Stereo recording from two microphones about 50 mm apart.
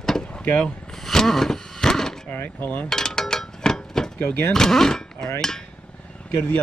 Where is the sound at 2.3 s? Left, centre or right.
Left.